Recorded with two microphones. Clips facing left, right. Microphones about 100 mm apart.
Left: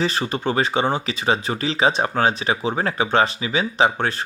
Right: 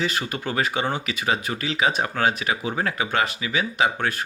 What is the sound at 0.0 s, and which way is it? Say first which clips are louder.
Speech: left 4 dB; 30° left (ahead or behind).